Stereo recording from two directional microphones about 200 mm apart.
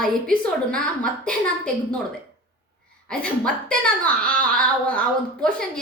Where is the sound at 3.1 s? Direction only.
5° left (ahead or behind).